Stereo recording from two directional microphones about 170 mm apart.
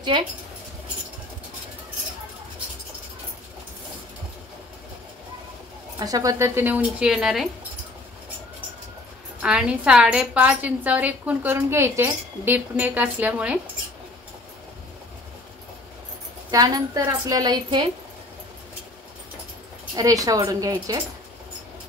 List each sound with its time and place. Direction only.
5.9 s a woman's voice: 20° right (ahead or behind); by 7.4 s centre (ahead or behind)
9.4 s a woman's voice: 5° right (ahead or behind)
16.4 s a woman's voice: 25° right (ahead or behind)
20.0 s a woman's voice: 20° right (ahead or behind)